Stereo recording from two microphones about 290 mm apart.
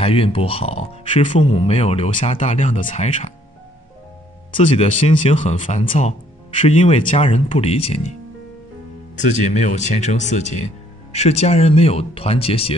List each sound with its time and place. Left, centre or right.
0.0 s speech: centre
4.6 s speech: left
9.1 s speech: left